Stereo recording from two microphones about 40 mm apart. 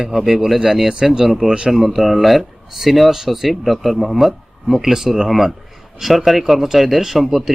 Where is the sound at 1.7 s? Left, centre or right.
Centre.